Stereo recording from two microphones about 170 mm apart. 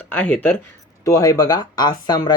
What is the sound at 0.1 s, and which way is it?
Speech, 10° left (ahead or behind).